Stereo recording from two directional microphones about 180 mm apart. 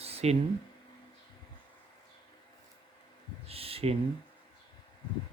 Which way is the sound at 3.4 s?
30° right (ahead or behind).